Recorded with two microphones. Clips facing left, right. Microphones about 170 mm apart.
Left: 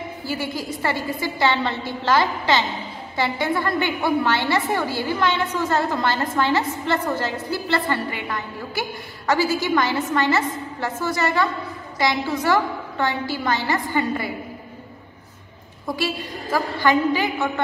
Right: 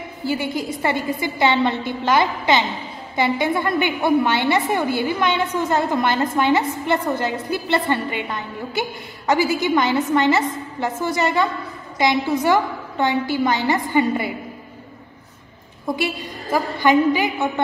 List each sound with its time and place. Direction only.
0.2 s a woman's voice: 20° right (ahead or behind)
16.5 s a woman's voice: 20° right (ahead or behind)